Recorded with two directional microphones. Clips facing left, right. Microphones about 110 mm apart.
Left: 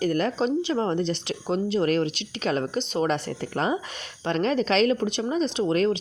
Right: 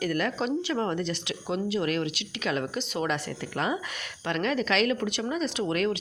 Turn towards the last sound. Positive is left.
turn(degrees=30)  # may be behind; listen again after turning